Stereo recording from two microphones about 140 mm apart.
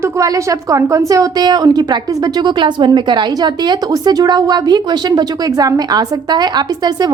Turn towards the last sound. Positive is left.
turn(degrees=-30)  # may be behind; listen again after turning